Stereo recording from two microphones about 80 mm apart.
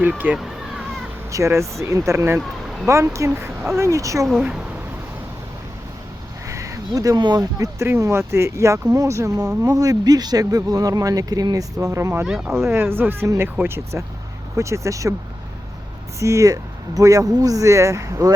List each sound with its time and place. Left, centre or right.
0.0 s speech: centre
0.3 s a sound: centre
1.3 s speech: right
6.5 s a sound: right
7.2 s speech: right
7.6 s speech: right
11.9 s speech: right
12.2 s speech: centre
12.6 s speech: right
16.2 s speech: right